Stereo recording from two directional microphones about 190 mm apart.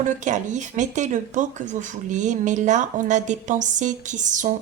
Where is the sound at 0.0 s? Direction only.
40° right (ahead or behind).